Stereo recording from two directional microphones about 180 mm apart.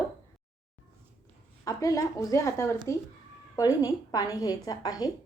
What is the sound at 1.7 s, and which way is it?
A woman's voice, 20° left (ahead or behind).